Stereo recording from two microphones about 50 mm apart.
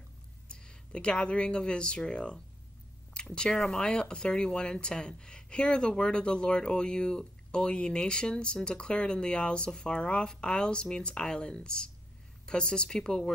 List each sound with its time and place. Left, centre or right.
0.5 s speech: centre